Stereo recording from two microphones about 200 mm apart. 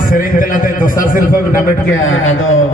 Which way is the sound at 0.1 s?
45° left (ahead or behind).